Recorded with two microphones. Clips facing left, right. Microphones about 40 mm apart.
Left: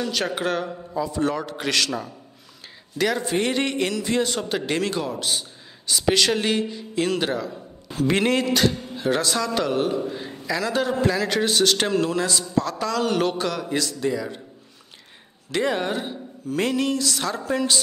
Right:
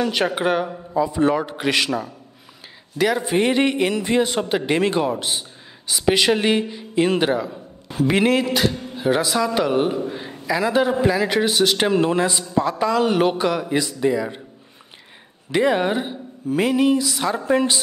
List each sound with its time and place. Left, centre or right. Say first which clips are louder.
0.0 s a man's voice: right 5 dB; right
0.3 s a man's voice: right 4 dB; centre
15.5 s a man's voice: right 5 dB; centre
17.4 s a man's voice: right 6 dB; right